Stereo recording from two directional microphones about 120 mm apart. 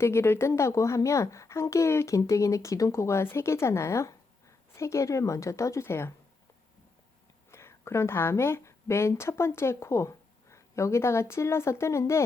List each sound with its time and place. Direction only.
0.0 s speech: 20° left (ahead or behind)
7.5 s speech: 20° left (ahead or behind)